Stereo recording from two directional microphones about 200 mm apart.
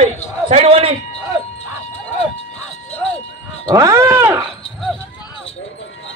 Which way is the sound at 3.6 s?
15° right (ahead or behind).